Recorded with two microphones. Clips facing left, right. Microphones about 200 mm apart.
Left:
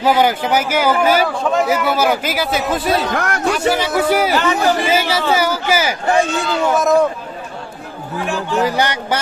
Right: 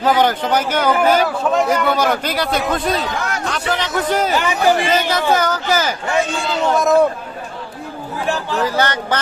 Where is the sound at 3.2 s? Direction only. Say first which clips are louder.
Left 3 dB; 60° left (ahead or behind).